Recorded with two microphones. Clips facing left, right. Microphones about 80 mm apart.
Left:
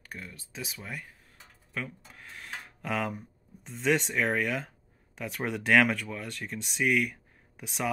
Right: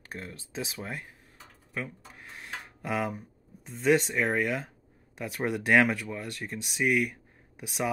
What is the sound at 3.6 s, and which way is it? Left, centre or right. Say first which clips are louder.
Speech: right 3 dB; centre.